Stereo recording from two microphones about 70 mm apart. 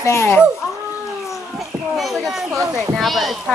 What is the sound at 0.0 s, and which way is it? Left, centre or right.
Speech, left.